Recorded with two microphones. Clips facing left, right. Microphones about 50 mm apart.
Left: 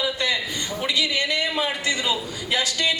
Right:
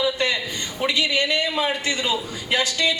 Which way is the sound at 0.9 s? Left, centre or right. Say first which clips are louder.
Right 3 dB; right.